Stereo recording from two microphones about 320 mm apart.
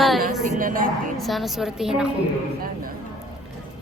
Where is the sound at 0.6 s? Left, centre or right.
Right.